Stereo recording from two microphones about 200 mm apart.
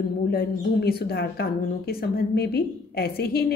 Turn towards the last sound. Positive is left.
turn(degrees=50)  # may be behind; listen again after turning